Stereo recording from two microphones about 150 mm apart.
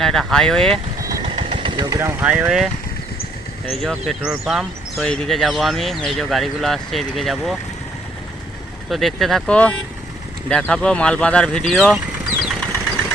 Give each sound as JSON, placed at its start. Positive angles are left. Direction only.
{"t": 0.0, "sound": "speech", "side_deg": 5}
{"t": 1.2, "sound": "engine", "side_deg": -40}
{"t": 2.3, "sound": "speech", "side_deg": -5}
{"t": 3.7, "sound": "speech", "side_deg": 0}
{"t": 8.9, "sound": "speech", "side_deg": 0}
{"t": 12.4, "sound": "engine", "side_deg": 0}